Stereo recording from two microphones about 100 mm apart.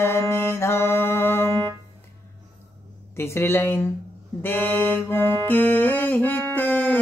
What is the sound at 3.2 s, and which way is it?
Speech, 25° left (ahead or behind).